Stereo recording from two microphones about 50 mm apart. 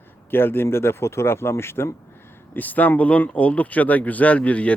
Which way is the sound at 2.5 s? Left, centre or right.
Left.